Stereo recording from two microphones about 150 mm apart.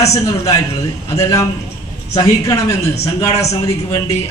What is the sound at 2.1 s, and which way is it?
A man's voice, 20° left (ahead or behind).